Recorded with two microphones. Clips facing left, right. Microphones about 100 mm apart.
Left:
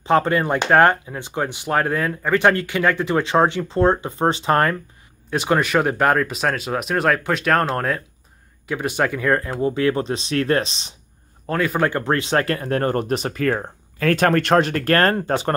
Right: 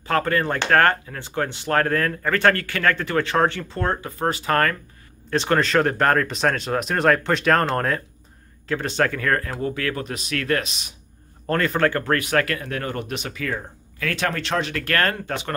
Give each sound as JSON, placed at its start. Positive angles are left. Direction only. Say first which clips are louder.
{"t": 0.0, "sound": "speech", "louder": "left 4 dB", "side_deg": 20}
{"t": 5.3, "sound": "speech", "louder": "left 1 dB", "side_deg": 10}
{"t": 8.6, "sound": "speech", "louder": "left 1 dB", "side_deg": 15}
{"t": 11.4, "sound": "speech", "louder": "even", "side_deg": 5}